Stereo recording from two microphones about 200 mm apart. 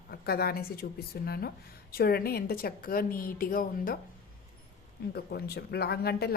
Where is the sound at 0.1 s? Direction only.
50° left (ahead or behind).